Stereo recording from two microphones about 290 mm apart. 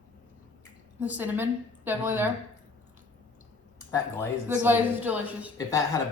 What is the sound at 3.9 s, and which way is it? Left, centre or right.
Speech, centre.